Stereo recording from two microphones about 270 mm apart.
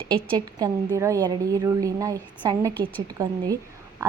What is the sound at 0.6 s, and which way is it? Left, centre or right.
Speech, centre.